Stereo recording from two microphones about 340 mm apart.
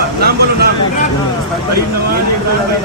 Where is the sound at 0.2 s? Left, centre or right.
Right.